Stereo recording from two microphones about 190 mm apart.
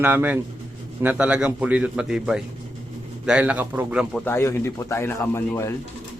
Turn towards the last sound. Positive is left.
turn(degrees=15)  # may be behind; listen again after turning